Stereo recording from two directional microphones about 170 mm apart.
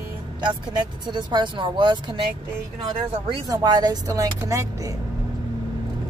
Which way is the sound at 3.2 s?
25° right (ahead or behind).